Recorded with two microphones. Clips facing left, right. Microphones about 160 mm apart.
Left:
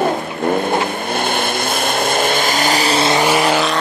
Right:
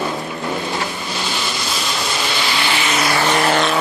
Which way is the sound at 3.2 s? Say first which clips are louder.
Left 2 dB; 10° left (ahead or behind).